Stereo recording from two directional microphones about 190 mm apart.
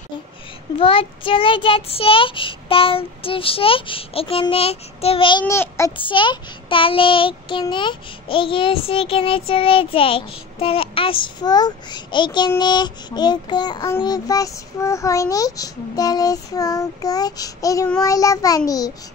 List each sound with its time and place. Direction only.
0.7 s child singing: 30° left (ahead or behind)
5.4 s a child's voice: 15° left (ahead or behind)
5.9 s child singing: 25° left (ahead or behind)